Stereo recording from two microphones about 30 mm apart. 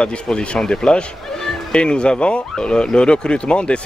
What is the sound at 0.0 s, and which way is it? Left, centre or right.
Speech, left.